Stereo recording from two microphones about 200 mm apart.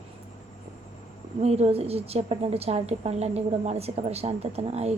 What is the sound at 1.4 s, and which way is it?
A woman's voice, 30° right (ahead or behind).